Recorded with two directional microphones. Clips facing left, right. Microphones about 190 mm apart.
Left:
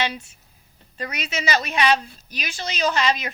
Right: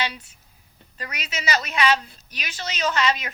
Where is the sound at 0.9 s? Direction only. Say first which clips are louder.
Left 5 dB; 25° left (ahead or behind).